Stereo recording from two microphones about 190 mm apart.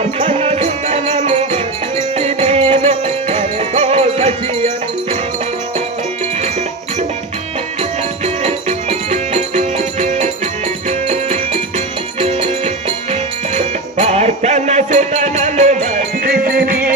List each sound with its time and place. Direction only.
0.0 s music: 35° right (ahead or behind)
7.8 s music: 35° right (ahead or behind)
16.3 s music: 55° right (ahead or behind)